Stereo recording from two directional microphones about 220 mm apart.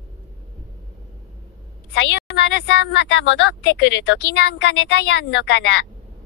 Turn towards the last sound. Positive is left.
turn(degrees=50)  # may be behind; listen again after turning